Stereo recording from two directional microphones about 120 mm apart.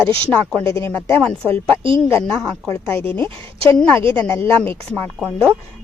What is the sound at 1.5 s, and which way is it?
Speech, 50° right (ahead or behind).